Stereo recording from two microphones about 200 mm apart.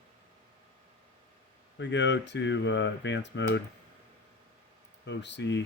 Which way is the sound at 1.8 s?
60° left (ahead or behind).